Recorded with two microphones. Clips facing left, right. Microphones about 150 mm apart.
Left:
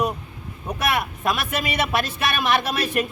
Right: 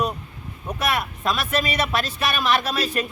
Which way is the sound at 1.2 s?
15° left (ahead or behind).